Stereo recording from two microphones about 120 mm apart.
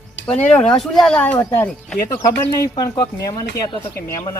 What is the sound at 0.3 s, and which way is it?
Speech, 10° left (ahead or behind).